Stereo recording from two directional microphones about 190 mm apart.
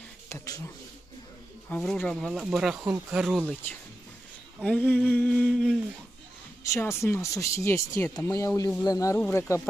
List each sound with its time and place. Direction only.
0.3 s speech: 15° left (ahead or behind)
1.7 s speech: 5° left (ahead or behind)
4.6 s speech: 5° left (ahead or behind)